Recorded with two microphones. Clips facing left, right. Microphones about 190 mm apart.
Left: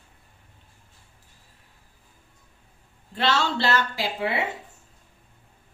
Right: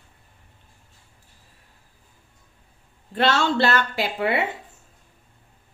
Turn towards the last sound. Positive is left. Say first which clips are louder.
# right 4 dB
turn(degrees=-60)  # may be behind; listen again after turning